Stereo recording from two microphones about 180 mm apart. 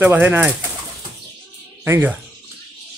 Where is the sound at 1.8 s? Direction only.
15° right (ahead or behind).